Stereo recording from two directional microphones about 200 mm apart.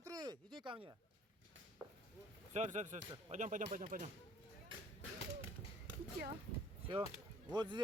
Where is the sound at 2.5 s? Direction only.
35° right (ahead or behind).